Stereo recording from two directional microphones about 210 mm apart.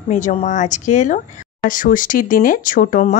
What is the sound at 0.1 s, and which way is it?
Speech, 35° left (ahead or behind).